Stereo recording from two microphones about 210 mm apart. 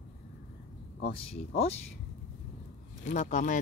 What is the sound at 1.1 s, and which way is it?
Speech, 25° left (ahead or behind).